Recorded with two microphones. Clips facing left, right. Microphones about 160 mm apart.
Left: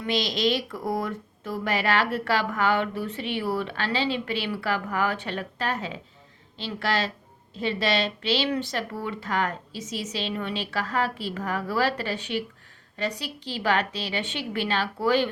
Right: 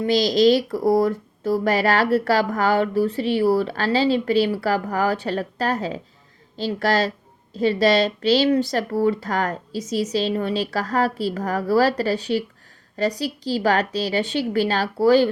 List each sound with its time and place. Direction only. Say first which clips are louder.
0.0 s speech: right 9 dB; 35° right (ahead or behind)